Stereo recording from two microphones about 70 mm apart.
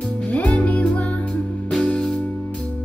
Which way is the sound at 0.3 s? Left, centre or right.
Centre.